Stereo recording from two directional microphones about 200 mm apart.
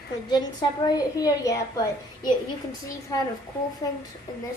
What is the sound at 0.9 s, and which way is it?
A woman's voice, 20° left (ahead or behind).